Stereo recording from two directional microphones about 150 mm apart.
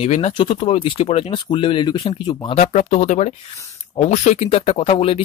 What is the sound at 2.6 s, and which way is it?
Speech, 50° left (ahead or behind).